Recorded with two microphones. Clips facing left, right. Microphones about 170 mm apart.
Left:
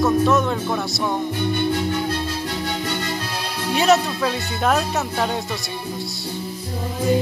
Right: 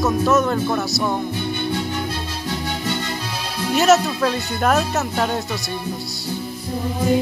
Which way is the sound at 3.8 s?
Centre (ahead or behind).